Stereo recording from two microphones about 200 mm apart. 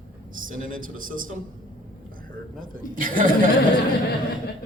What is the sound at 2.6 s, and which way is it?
Speech, 45° right (ahead or behind).